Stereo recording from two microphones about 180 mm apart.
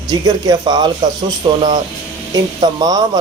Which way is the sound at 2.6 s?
20° right (ahead or behind).